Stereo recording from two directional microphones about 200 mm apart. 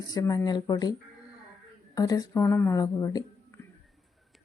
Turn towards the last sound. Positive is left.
turn(degrees=15)  # may be behind; listen again after turning